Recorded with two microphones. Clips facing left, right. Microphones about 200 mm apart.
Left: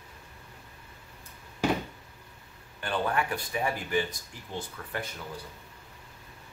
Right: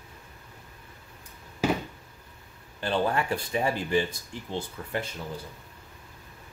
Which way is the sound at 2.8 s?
30° right (ahead or behind).